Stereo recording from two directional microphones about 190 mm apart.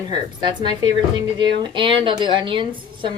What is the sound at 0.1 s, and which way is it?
Speech, 25° right (ahead or behind).